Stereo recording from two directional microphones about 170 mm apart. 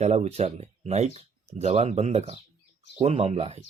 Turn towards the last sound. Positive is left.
turn(degrees=-40)  # may be behind; listen again after turning